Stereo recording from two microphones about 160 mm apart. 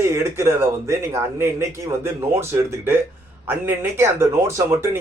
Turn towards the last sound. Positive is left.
turn(degrees=-20)  # may be behind; listen again after turning